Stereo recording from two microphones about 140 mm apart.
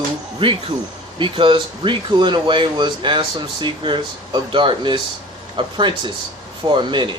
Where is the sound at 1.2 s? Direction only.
35° right (ahead or behind).